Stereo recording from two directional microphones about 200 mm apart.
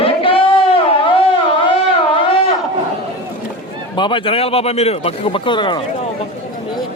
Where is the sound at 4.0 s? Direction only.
25° left (ahead or behind).